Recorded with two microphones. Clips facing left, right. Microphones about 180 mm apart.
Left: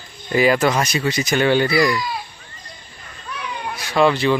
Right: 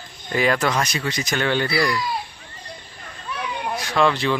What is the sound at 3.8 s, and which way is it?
Speech, 5° left (ahead or behind).